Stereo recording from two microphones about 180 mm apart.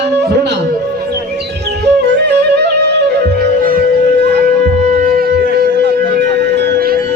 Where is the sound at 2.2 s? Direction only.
70° right (ahead or behind).